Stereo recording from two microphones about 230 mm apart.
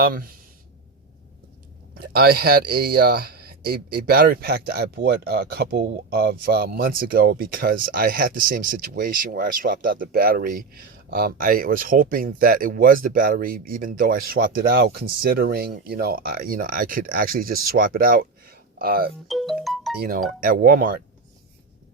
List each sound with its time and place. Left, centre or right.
0.0 s speech: right
2.0 s speech: right
19.3 s music: centre
20.0 s speech: right